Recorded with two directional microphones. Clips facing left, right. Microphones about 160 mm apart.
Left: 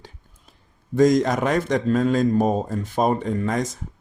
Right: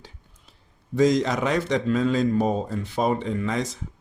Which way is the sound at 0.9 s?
50° left (ahead or behind).